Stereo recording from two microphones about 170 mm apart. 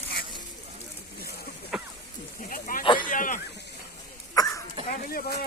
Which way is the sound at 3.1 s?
50° left (ahead or behind).